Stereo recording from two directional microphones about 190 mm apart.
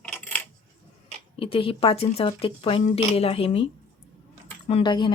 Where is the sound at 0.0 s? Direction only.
5° left (ahead or behind).